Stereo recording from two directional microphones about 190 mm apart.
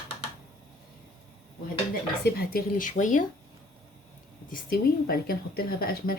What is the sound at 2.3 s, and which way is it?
Speech, 55° left (ahead or behind).